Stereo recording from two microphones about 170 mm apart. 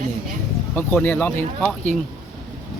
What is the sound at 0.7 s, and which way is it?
Speech, 10° left (ahead or behind).